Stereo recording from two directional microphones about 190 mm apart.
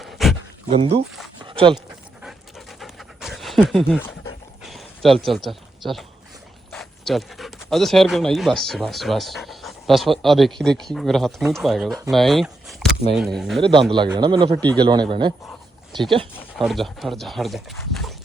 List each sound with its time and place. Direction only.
0.0 s a sound: centre (ahead or behind)
0.7 s speech: 30° right (ahead or behind)
1.5 s dog: 25° right (ahead or behind)
1.9 s pant: centre (ahead or behind)
4.6 s a sound: centre (ahead or behind)
6.7 s speech: centre (ahead or behind)
12.1 s a sound: centre (ahead or behind)
13.1 s speech: centre (ahead or behind)
13.6 s speech: 25° right (ahead or behind)
15.9 s speech: centre (ahead or behind)